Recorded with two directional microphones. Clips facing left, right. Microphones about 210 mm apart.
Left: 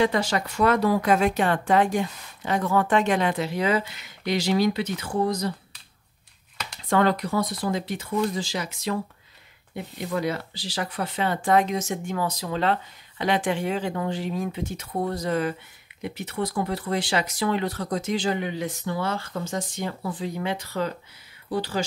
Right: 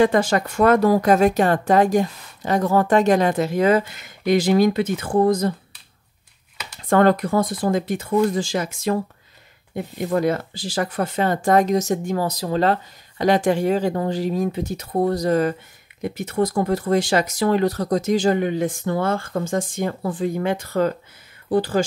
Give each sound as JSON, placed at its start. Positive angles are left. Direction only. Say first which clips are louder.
{"t": 0.0, "sound": "speech", "louder": "right 6 dB", "side_deg": -50}
{"t": 6.8, "sound": "speech", "louder": "right 6 dB", "side_deg": -50}